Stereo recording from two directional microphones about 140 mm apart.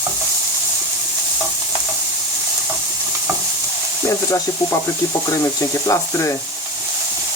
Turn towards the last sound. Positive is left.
turn(degrees=20)  # may be behind; listen again after turning